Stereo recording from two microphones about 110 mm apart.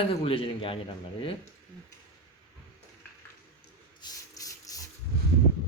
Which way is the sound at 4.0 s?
35° left (ahead or behind).